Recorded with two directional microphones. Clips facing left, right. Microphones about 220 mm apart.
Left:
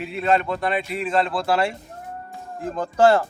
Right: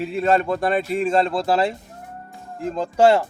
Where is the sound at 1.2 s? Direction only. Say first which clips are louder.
Right 2 dB; 25° right (ahead or behind).